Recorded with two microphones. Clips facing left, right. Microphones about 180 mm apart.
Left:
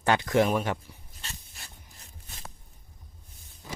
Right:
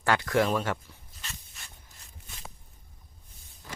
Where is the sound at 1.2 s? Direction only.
35° left (ahead or behind).